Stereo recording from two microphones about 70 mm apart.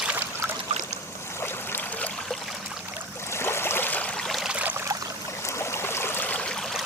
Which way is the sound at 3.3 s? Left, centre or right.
Left.